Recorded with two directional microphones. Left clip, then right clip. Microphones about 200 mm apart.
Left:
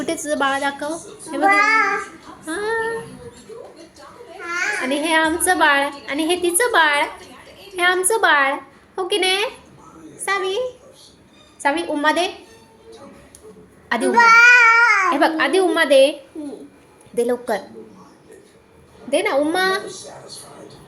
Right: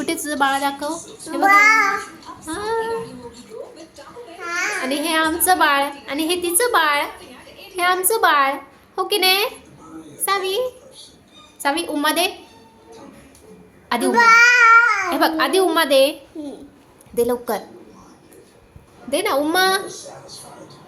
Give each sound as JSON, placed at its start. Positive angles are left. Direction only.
{"t": 0.0, "sound": "a woman's voice", "side_deg": -5}
{"t": 1.5, "sound": "child singing", "side_deg": -40}
{"t": 2.5, "sound": "female singing", "side_deg": 10}
{"t": 4.8, "sound": "a woman's voice", "side_deg": 0}
{"t": 11.6, "sound": "a woman's voice", "side_deg": -5}
{"t": 13.9, "sound": "a child's voice", "side_deg": -5}
{"t": 17.2, "sound": "a woman's voice", "side_deg": 0}
{"t": 19.1, "sound": "a woman's voice", "side_deg": -5}